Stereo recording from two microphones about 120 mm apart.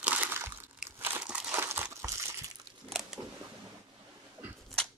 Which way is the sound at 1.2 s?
5° right (ahead or behind).